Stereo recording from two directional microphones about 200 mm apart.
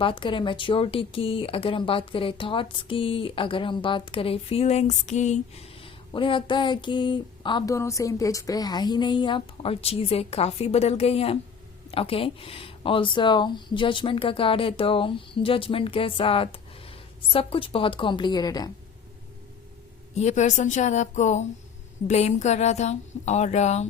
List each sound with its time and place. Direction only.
0.0 s speech: 25° left (ahead or behind)
20.1 s speech: 35° left (ahead or behind)